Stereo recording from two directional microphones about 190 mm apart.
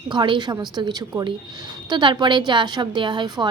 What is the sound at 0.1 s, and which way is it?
A woman's voice, 25° right (ahead or behind).